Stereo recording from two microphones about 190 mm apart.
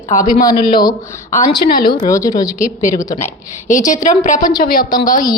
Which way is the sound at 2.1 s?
15° left (ahead or behind).